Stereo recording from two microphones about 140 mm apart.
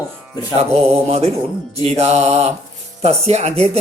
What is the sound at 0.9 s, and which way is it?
Speech, 45° right (ahead or behind).